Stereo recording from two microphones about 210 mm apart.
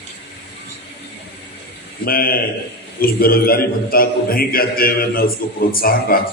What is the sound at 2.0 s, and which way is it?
A man's voice, 45° left (ahead or behind).